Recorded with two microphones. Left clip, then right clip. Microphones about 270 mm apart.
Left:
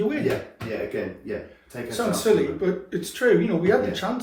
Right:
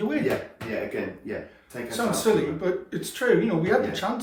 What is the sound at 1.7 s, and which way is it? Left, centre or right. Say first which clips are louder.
Speech: left 1 dB; centre.